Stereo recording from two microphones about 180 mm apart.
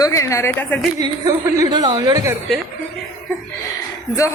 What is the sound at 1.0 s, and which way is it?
A woman's voice, 20° right (ahead or behind).